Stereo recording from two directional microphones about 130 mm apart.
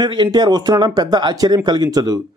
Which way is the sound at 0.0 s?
35° right (ahead or behind).